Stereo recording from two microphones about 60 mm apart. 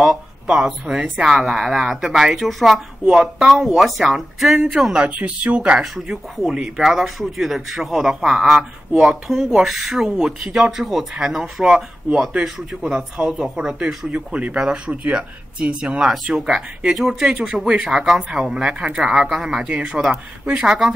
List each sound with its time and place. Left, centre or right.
0.0 s speech: centre
4.9 s speech: right
14.1 s speech: right; by 20.9 s centre